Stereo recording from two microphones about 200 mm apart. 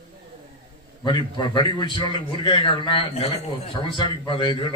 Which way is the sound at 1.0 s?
20° left (ahead or behind).